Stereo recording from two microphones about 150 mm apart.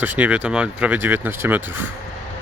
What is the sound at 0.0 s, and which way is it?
Speech, 10° right (ahead or behind).